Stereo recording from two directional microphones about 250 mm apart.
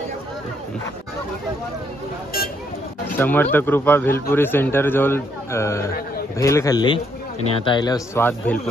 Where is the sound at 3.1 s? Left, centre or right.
Centre.